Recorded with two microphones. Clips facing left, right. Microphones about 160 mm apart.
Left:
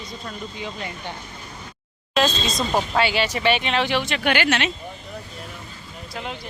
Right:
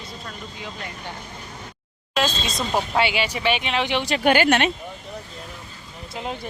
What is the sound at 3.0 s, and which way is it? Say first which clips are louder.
Speech: even; 20° right (ahead or behind).